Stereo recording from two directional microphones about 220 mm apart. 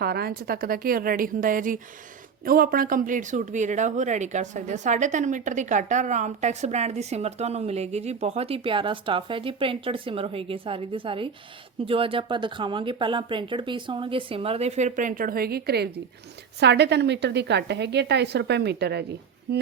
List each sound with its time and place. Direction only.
0.0 s a woman's voice: 45° right (ahead or behind)